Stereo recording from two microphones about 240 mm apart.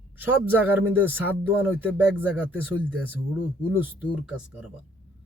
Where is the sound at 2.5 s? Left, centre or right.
Centre.